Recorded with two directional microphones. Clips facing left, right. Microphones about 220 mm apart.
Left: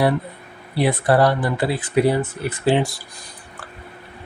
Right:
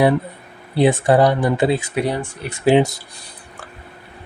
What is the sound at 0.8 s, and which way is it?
Speech, 25° right (ahead or behind).